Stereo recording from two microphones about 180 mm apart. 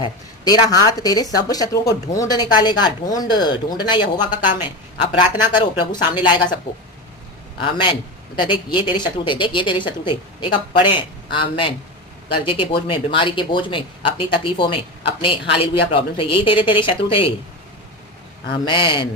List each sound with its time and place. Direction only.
0.0 s speech: 20° left (ahead or behind)
7.6 s speech: 25° left (ahead or behind)
18.5 s speech: 25° left (ahead or behind)